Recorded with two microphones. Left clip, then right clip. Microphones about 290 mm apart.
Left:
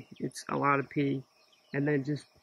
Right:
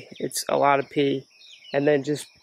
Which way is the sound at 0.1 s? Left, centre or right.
Centre.